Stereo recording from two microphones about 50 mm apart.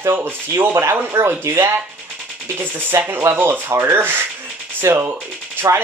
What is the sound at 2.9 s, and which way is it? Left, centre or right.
Speech, right.